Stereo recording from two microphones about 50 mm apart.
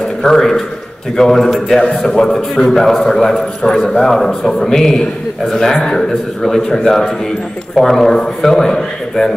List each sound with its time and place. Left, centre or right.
0.2 s a man's voice: centre